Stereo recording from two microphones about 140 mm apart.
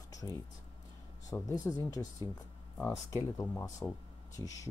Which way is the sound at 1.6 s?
25° left (ahead or behind).